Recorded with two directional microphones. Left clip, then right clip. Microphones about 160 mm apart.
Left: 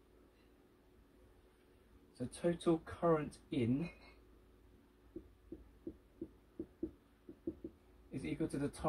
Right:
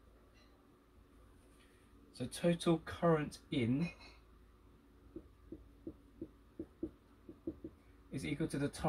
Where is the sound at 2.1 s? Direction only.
10° left (ahead or behind).